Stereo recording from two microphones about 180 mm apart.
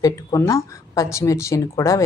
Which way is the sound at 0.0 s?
20° left (ahead or behind).